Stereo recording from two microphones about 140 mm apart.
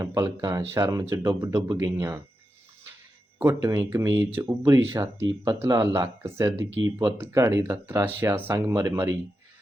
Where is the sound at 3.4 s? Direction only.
20° right (ahead or behind).